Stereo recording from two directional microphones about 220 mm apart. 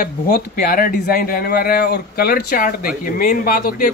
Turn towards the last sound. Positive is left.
turn(degrees=40)  # may be behind; listen again after turning